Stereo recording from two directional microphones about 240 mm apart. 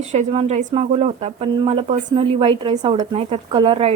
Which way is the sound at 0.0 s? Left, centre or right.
Right.